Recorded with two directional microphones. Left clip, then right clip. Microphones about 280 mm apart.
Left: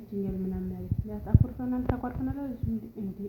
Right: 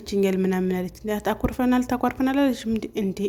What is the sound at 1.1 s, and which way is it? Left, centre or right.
Speech, right.